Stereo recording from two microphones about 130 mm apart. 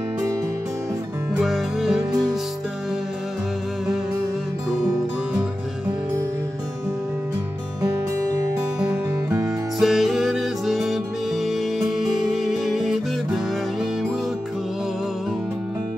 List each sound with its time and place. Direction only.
1.4 s music: centre (ahead or behind)
8.8 s music: 20° right (ahead or behind)
9.8 s music: centre (ahead or behind)
12.0 s music: centre (ahead or behind)